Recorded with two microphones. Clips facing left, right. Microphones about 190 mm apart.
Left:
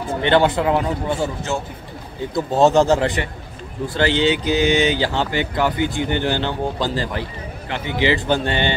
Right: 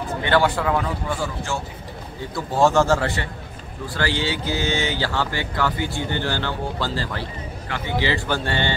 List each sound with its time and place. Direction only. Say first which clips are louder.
0.2 s speech: left 4 dB; 20° left (ahead or behind)